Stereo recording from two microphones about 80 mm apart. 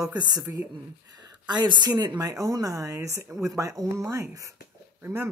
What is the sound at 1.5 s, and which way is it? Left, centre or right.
Speech, right.